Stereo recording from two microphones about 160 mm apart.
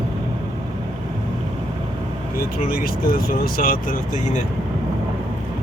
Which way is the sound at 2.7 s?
65° left (ahead or behind).